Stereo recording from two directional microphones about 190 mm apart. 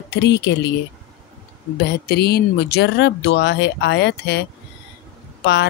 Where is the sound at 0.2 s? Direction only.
65° left (ahead or behind).